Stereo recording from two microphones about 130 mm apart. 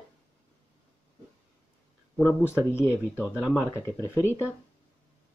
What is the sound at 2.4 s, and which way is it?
Speech, 20° left (ahead or behind).